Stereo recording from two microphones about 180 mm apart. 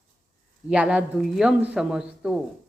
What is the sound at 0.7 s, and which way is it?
A woman's voice, 5° right (ahead or behind).